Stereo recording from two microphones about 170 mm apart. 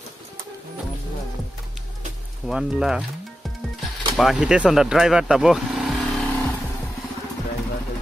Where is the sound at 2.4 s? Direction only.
5° right (ahead or behind).